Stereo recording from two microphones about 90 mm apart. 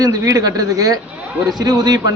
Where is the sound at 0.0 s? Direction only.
45° right (ahead or behind).